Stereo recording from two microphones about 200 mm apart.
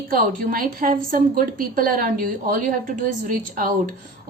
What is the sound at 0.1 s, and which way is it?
A woman's voice, 45° right (ahead or behind).